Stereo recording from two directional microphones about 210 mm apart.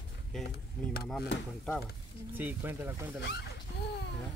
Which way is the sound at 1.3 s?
60° left (ahead or behind).